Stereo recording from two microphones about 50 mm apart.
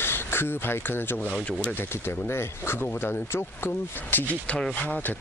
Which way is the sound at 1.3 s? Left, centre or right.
Left.